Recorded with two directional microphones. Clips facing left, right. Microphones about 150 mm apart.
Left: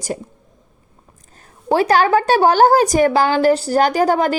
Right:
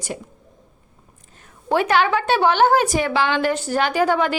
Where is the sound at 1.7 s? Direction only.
40° left (ahead or behind).